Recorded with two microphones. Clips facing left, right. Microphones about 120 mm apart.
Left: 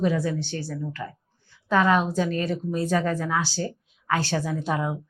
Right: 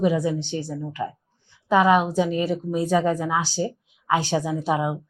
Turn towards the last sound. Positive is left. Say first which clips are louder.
# right 3 dB
turn(degrees=-15)  # may be behind; listen again after turning